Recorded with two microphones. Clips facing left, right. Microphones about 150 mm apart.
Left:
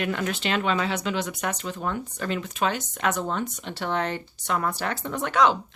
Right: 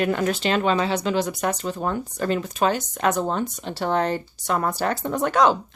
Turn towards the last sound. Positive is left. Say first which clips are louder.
# right 3 dB
turn(degrees=-40)  # may be behind; listen again after turning